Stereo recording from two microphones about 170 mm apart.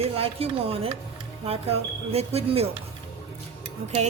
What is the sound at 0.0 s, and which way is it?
Speech, 35° right (ahead or behind).